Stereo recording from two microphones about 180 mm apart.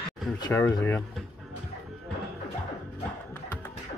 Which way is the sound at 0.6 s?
10° left (ahead or behind).